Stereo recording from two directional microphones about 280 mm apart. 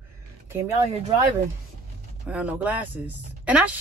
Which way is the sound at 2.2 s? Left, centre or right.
Centre.